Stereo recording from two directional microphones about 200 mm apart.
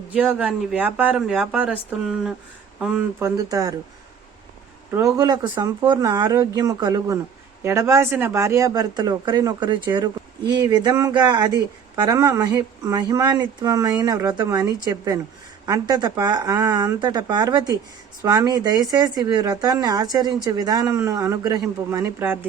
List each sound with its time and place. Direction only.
0.1 s speech: 5° right (ahead or behind)
4.9 s speech: 15° right (ahead or behind)